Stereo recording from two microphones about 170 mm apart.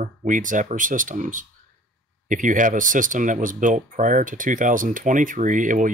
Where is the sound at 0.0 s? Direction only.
50° right (ahead or behind).